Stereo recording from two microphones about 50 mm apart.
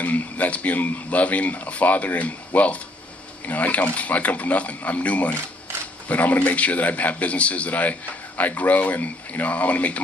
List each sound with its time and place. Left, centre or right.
0.0 s a man's voice: left